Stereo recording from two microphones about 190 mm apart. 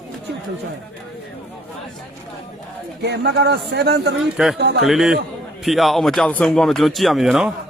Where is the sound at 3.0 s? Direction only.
60° right (ahead or behind).